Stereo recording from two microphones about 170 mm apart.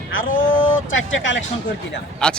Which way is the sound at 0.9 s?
90° left.